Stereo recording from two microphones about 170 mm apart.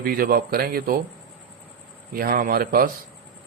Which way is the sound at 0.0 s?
55° right (ahead or behind).